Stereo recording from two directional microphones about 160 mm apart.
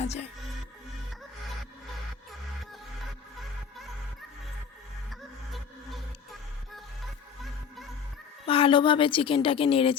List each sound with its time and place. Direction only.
0.0 s music: 40° left (ahead or behind)
8.4 s a woman's voice: 35° left (ahead or behind)